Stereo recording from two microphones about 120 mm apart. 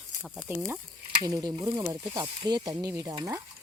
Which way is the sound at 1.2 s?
30° right (ahead or behind).